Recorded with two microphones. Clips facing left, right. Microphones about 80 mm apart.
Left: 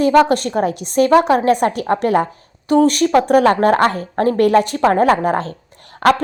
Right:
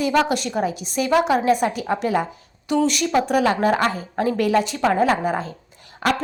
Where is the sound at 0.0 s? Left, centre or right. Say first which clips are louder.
Left 7 dB; left.